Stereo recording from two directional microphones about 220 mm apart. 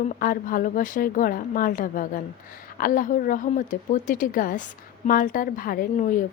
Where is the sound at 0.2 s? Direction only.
40° left (ahead or behind).